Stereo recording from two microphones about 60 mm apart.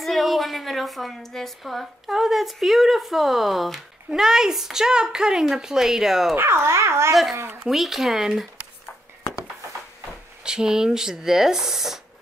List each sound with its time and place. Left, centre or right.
0.0 s a sound: centre
1.6 s a woman's voice: centre
6.3 s speech: right
7.6 s a woman's voice: centre
10.4 s speech: centre